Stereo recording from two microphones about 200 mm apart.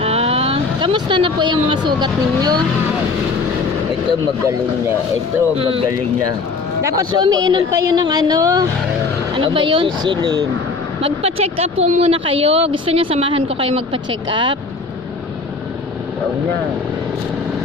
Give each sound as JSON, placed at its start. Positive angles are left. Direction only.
{"t": 0.0, "sound": "speech", "side_deg": -30}
{"t": 5.5, "sound": "speech", "side_deg": -30}
{"t": 6.8, "sound": "speech", "side_deg": -15}